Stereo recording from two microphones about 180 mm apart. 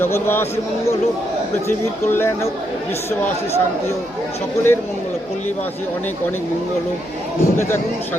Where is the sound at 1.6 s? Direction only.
15° left (ahead or behind).